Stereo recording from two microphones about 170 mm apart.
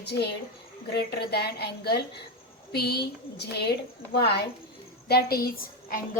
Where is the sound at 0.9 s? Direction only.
70° left (ahead or behind).